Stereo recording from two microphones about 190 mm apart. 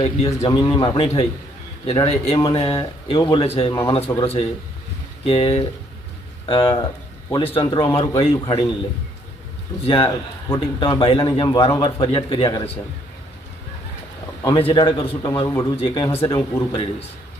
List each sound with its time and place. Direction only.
0.0 s speech: 30° left (ahead or behind)
7.7 s speech: 15° left (ahead or behind)
9.8 s speech: 30° left (ahead or behind)
14.4 s speech: 25° left (ahead or behind)
15.7 s speech: 30° left (ahead or behind)
16.0 s speech: 15° left (ahead or behind)